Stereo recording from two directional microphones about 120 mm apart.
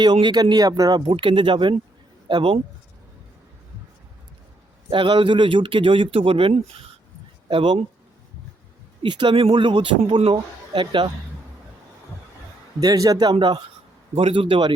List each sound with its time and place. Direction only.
0.0 s speech: 35° right (ahead or behind)
1.0 s a man's voice: 50° right (ahead or behind)
4.9 s a man's voice: 45° right (ahead or behind)
9.0 s a man's voice: 40° right (ahead or behind)
12.8 s speech: 30° right (ahead or behind)
14.2 s a man's voice: 45° right (ahead or behind)